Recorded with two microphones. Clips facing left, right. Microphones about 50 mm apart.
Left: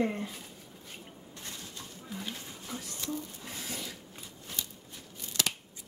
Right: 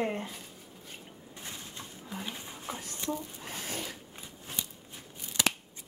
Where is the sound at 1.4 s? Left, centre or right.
Centre.